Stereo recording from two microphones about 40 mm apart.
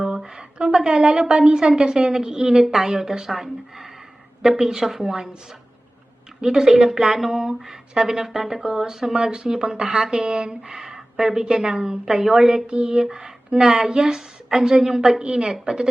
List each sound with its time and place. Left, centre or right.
0.0 s a sound: centre
0.9 s speech: centre
6.4 s a woman's voice: centre